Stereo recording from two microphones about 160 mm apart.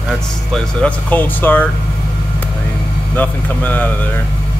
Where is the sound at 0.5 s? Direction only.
10° left (ahead or behind).